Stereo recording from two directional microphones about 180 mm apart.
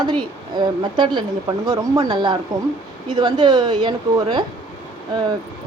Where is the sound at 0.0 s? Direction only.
25° right (ahead or behind).